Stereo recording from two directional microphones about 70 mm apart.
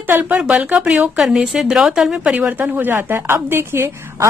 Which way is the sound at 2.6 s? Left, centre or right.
Right.